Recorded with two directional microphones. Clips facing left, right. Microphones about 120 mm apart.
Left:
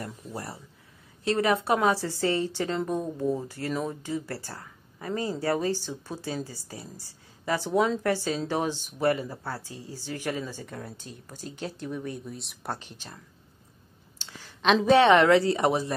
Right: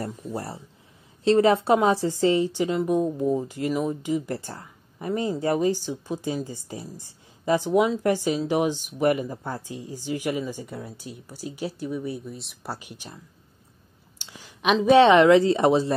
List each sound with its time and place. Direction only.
0.0 s a woman's voice: 25° right (ahead or behind)
14.1 s clicking: 15° right (ahead or behind)
14.9 s speech: 20° right (ahead or behind)